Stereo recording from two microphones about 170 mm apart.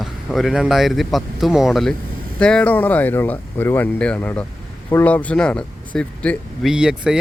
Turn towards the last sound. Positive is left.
turn(degrees=-5)  # may be behind; listen again after turning